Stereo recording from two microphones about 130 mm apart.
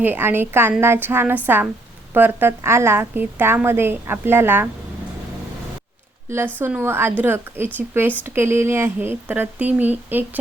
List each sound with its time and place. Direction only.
0.0 s a woman's voice: 15° right (ahead or behind)
6.3 s a woman's voice: 15° right (ahead or behind)